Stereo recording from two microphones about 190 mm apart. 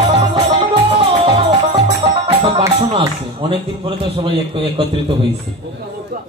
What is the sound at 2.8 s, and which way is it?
Speech, 30° right (ahead or behind).